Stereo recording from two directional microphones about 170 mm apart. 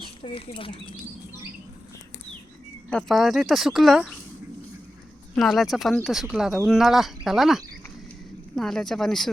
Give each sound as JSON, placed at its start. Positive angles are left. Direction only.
{"t": 0.0, "sound": "speech", "side_deg": 35}
{"t": 2.9, "sound": "speech", "side_deg": 0}
{"t": 5.3, "sound": "speech", "side_deg": 0}